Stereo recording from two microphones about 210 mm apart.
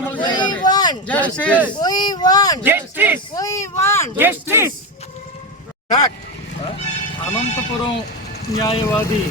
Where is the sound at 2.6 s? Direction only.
10° right (ahead or behind).